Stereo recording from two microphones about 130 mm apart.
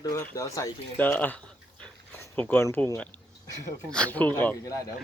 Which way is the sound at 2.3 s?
15° left (ahead or behind).